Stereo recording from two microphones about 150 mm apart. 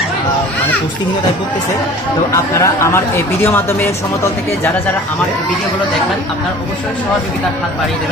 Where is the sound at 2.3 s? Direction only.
20° left (ahead or behind).